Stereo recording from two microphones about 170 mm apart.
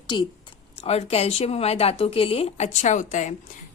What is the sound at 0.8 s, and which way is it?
A woman's voice, 35° left (ahead or behind).